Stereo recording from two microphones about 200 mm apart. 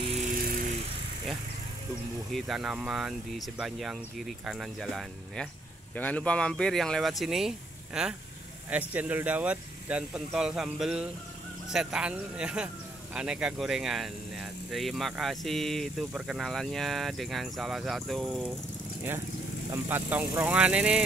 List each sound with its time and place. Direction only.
0.3 s vehicle: 45° right (ahead or behind)
2.3 s speech: centre (ahead or behind)
19.7 s speech: 10° right (ahead or behind)